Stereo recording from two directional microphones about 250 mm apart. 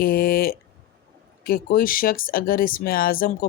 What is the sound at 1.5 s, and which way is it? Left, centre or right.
Speech, left.